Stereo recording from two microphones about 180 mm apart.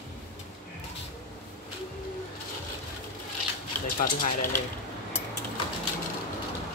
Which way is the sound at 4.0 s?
50° left (ahead or behind).